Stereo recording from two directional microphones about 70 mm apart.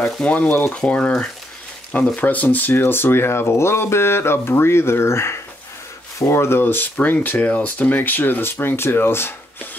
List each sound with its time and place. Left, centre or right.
0.2 s speech: left
2.1 s speech: left